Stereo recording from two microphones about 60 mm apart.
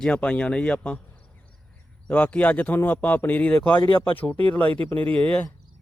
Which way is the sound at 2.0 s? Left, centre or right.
Left.